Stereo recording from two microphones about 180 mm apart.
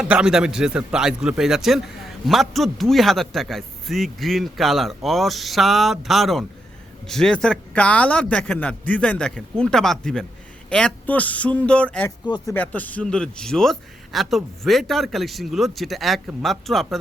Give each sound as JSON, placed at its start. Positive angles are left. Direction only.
{"t": 0.0, "sound": "a man's voice", "side_deg": -5}